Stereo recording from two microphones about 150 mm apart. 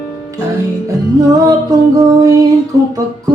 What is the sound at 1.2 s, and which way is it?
Music, 25° right (ahead or behind).